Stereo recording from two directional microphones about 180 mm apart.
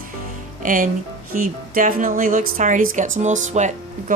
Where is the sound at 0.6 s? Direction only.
50° right (ahead or behind).